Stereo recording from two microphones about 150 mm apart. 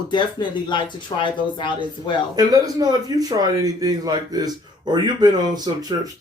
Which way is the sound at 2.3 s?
25° right (ahead or behind).